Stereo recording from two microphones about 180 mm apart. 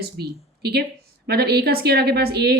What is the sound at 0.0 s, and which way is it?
A woman's voice, 60° right (ahead or behind).